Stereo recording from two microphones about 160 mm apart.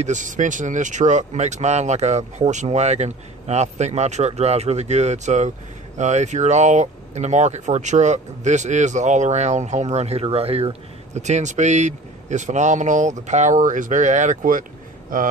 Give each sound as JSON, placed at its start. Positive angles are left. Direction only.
{"t": 0.0, "sound": "speech", "side_deg": -50}